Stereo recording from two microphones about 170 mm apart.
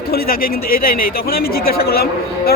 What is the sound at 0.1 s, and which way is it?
A man's voice, 60° left (ahead or behind).